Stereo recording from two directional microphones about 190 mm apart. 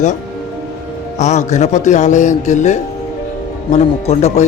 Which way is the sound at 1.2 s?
40° left (ahead or behind).